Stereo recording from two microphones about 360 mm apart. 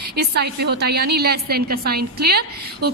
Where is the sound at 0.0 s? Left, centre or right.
Right.